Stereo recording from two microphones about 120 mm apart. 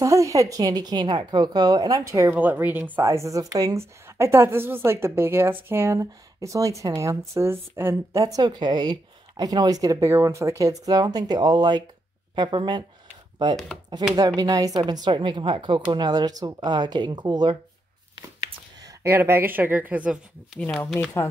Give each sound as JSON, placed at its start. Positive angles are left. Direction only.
{"t": 0.0, "sound": "speech", "side_deg": -25}
{"t": 3.0, "sound": "a woman's voice", "side_deg": -25}
{"t": 14.1, "sound": "speech", "side_deg": -30}
{"t": 18.8, "sound": "speech", "side_deg": -25}